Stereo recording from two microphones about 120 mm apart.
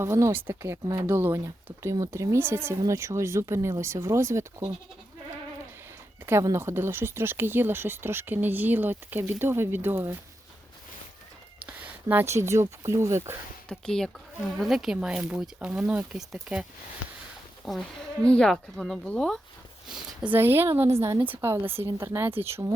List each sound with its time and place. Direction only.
0.0 s speech: 20° right (ahead or behind)
6.2 s speech: 20° right (ahead or behind)
11.6 s speech: 15° right (ahead or behind)
13.7 s speech: 5° left (ahead or behind)
17.7 s speech: 5° left (ahead or behind)
19.9 s speech: 5° right (ahead or behind)
20.3 s speech: 20° right (ahead or behind)